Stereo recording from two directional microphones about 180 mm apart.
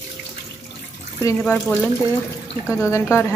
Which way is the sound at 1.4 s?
Centre (ahead or behind).